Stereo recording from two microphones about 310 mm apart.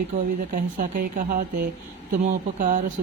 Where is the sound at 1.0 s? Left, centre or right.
Right.